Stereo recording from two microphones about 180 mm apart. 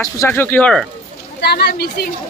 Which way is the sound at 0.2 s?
10° left (ahead or behind).